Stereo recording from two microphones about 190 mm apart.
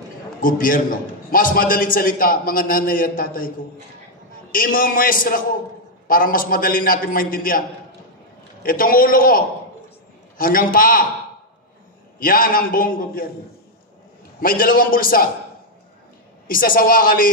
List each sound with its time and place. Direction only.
0.4 s a man's voice: 45° left (ahead or behind)
8.6 s a man's voice: 50° left (ahead or behind)
12.2 s a man's voice: 50° left (ahead or behind)
14.4 s a man's voice: 50° left (ahead or behind)
16.4 s a man's voice: 45° left (ahead or behind)